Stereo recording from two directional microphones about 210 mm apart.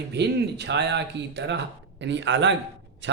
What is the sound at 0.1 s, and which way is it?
A man's voice, 55° right (ahead or behind).